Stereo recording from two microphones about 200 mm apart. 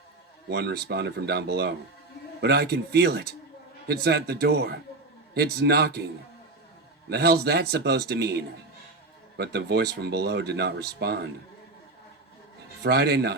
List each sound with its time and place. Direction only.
0.4 s a man's voice: 55° right (ahead or behind)
7.1 s speech: 55° right (ahead or behind)
12.8 s speech: 55° right (ahead or behind)